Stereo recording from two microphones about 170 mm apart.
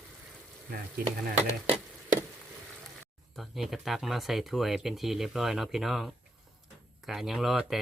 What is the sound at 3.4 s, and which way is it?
Speech, centre (ahead or behind).